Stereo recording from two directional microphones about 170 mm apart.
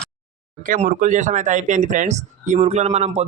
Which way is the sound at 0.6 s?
50° right (ahead or behind).